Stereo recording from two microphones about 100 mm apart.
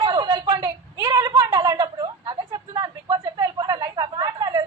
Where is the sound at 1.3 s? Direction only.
50° right (ahead or behind).